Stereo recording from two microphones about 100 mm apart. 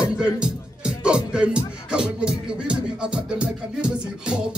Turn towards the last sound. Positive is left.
turn(degrees=-10)  # may be behind; listen again after turning